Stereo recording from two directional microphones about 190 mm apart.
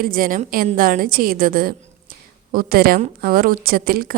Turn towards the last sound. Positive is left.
turn(degrees=-50)  # may be behind; listen again after turning